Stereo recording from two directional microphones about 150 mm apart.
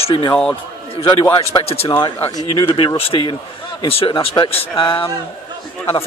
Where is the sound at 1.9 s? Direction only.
20° left (ahead or behind).